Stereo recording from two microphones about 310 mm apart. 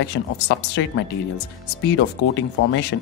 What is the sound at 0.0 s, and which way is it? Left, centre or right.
Speech, left.